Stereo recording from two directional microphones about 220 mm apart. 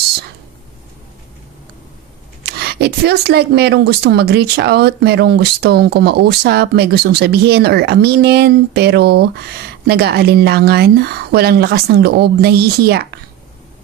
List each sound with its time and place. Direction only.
2.4 s speech: 45° right (ahead or behind)